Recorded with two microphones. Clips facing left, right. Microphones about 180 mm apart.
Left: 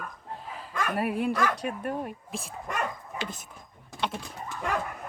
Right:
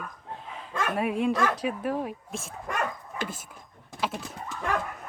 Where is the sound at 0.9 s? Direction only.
Centre (ahead or behind).